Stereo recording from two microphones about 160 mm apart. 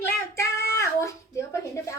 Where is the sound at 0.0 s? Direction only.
15° left (ahead or behind).